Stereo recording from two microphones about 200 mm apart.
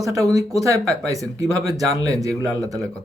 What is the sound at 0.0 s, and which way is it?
Speech, 15° right (ahead or behind).